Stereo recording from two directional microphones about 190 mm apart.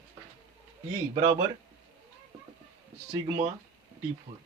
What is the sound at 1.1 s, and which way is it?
Speech, 20° right (ahead or behind).